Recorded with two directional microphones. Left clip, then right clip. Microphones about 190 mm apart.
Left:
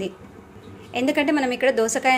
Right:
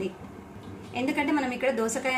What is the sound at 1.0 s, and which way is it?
A woman's voice, 50° left (ahead or behind).